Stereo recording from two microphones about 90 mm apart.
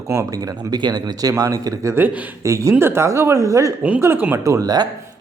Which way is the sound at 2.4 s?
35° right (ahead or behind).